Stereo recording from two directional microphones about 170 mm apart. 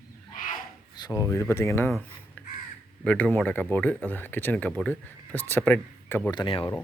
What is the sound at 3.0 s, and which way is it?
Speech, 10° left (ahead or behind).